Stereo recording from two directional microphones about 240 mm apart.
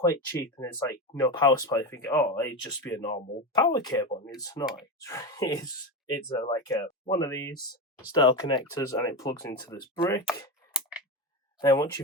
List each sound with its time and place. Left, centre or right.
0.0 s speech: centre
11.6 s speech: centre